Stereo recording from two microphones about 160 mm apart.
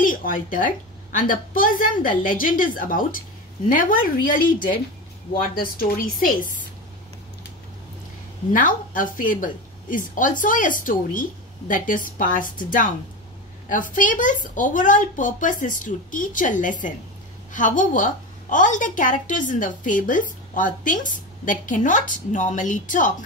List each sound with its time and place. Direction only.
0.0 s a sound: 55° left (ahead or behind)
1.1 s a woman's voice: 60° left (ahead or behind)
5.4 s a woman's voice: 60° left (ahead or behind)
8.5 s a woman's voice: 55° left (ahead or behind)